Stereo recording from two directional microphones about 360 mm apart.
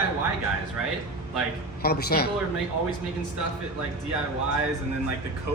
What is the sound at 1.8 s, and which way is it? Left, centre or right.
Speech, left.